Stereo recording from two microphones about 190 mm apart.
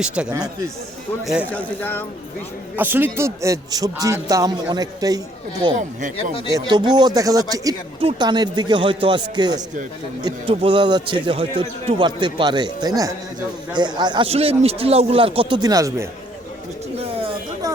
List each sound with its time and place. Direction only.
0.2 s speech: 5° right (ahead or behind)
1.5 s speech: 10° left (ahead or behind)
2.7 s a man's voice: 10° right (ahead or behind)
5.7 s speech: 40° right (ahead or behind)
6.5 s a man's voice: 25° right (ahead or behind)
17.0 s a sound: 30° right (ahead or behind)